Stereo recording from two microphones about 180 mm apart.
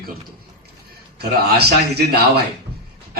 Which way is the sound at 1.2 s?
65° right (ahead or behind).